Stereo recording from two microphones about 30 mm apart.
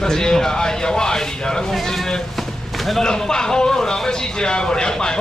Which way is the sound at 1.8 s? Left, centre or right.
Centre.